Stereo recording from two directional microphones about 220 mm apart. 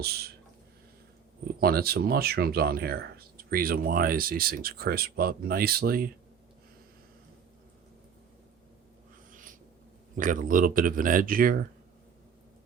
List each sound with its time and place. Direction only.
0.0 s speech: 45° right (ahead or behind)
1.6 s speech: 45° right (ahead or behind)
9.3 s writing: 35° right (ahead or behind)
10.2 s speech: 35° right (ahead or behind)